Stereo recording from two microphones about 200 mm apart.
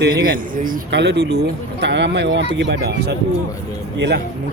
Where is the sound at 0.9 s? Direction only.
60° right (ahead or behind).